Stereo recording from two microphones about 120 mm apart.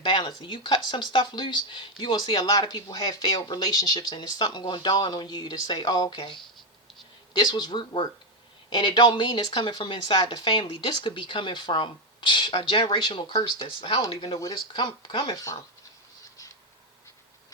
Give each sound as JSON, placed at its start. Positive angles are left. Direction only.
{"t": 0.0, "sound": "speech", "side_deg": 40}
{"t": 2.5, "sound": "a woman's voice", "side_deg": 35}